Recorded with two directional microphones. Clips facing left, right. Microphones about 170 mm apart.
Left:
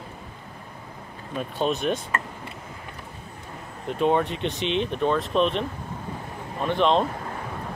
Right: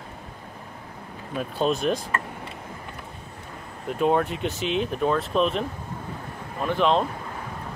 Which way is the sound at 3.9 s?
Centre (ahead or behind).